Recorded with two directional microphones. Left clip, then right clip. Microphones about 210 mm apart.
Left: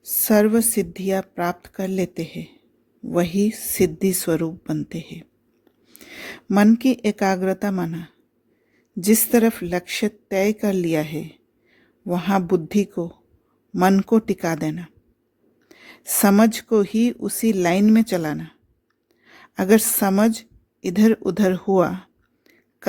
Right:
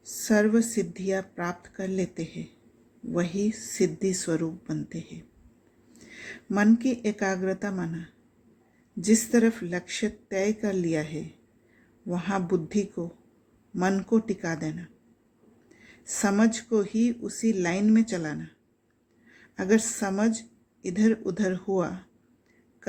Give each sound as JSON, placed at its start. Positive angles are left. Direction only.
{"t": 0.0, "sound": "a woman's voice", "side_deg": 45}